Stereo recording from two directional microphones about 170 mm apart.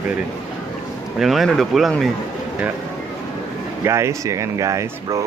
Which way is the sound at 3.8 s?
15° right (ahead or behind).